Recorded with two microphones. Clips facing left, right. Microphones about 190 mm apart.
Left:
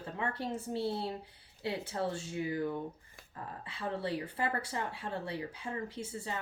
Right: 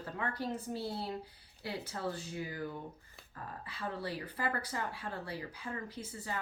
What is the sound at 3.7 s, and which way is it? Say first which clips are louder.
Speech: left 4 dB; 25° left (ahead or behind).